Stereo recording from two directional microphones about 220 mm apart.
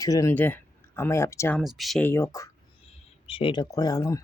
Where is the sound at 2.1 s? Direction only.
15° left (ahead or behind).